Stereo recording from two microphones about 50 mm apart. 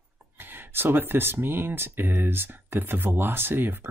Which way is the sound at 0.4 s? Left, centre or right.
Right.